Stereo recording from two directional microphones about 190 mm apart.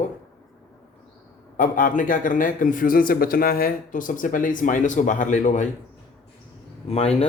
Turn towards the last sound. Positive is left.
turn(degrees=35)  # may be behind; listen again after turning